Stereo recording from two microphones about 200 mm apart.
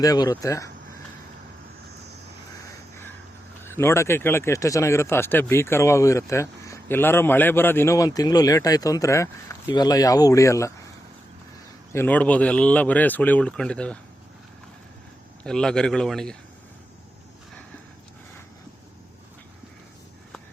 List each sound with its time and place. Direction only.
0.0 s speech: 20° left (ahead or behind)
3.6 s speech: 10° left (ahead or behind)
11.9 s speech: 10° left (ahead or behind)
15.4 s a man's voice: 5° left (ahead or behind)